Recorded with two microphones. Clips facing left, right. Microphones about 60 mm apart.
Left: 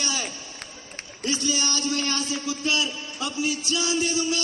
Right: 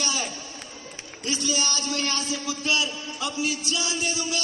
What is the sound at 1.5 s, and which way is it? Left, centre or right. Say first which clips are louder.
Speech: left 1 dB; right.